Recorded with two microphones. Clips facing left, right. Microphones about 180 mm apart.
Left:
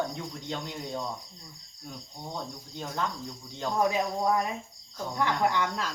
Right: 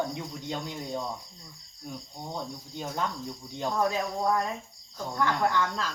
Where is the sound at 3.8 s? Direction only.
15° left (ahead or behind).